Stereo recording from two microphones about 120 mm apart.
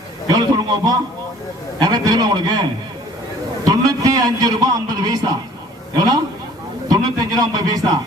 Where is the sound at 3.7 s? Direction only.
30° right (ahead or behind).